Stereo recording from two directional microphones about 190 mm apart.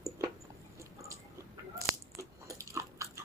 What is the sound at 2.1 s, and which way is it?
Biting, 15° right (ahead or behind).